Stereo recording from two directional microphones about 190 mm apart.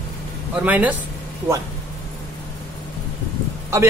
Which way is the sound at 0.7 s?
10° right (ahead or behind).